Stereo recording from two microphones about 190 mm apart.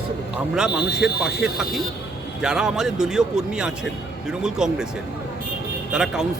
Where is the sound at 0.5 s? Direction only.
5° right (ahead or behind).